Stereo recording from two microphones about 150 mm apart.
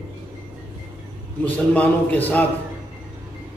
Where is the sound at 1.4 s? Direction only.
10° left (ahead or behind).